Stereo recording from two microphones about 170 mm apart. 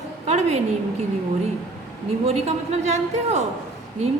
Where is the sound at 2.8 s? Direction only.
40° right (ahead or behind).